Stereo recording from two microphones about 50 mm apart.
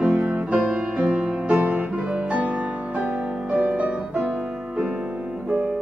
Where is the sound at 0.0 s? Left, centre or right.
Right.